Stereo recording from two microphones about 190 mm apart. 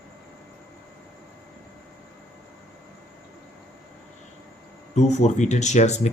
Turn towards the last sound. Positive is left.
turn(degrees=35)  # may be behind; listen again after turning